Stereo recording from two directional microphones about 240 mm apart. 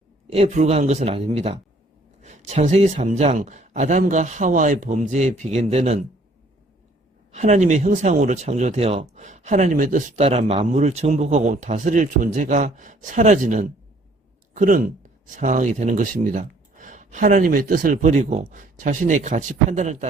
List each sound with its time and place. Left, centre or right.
0.3 s speech: right
7.3 s speech: right